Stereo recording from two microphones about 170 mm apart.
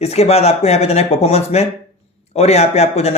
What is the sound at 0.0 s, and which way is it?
A man's voice, 40° left (ahead or behind).